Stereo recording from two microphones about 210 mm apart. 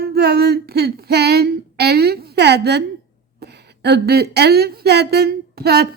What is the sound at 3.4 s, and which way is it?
A woman's voice, 50° right (ahead or behind).